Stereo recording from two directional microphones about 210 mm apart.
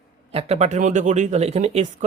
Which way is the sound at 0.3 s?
30° right (ahead or behind).